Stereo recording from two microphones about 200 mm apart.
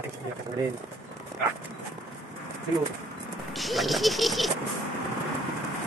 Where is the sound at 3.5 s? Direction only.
Centre (ahead or behind).